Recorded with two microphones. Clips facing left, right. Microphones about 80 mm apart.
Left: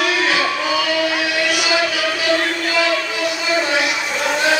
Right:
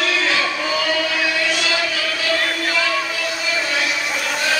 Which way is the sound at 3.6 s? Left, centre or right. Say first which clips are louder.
Left 4 dB; left.